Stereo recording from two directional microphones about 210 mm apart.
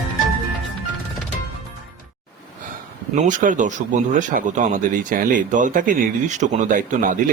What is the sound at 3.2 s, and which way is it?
Speech, 35° right (ahead or behind).